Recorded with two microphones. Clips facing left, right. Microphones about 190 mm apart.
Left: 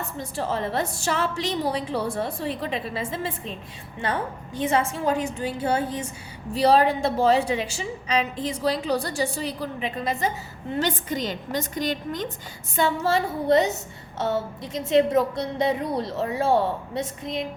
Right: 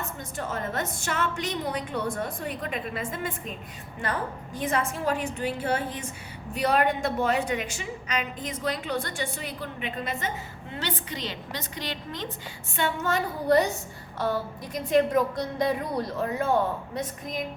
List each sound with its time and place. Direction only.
0.2 s a woman's voice: 30° left (ahead or behind)
12.7 s a woman's voice: 35° left (ahead or behind)